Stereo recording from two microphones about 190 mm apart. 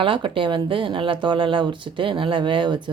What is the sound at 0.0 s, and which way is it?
Speech, 25° right (ahead or behind).